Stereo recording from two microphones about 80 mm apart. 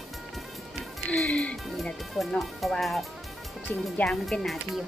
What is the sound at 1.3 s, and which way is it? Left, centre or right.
Speech, centre.